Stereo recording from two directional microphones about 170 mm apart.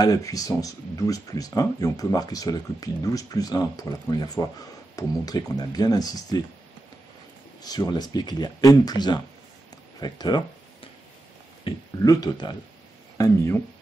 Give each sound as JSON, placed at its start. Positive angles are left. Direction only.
{"t": 0.0, "sound": "speech", "side_deg": 20}
{"t": 7.6, "sound": "speech", "side_deg": 20}
{"t": 9.9, "sound": "a sound", "side_deg": 25}
{"t": 11.6, "sound": "speech", "side_deg": 20}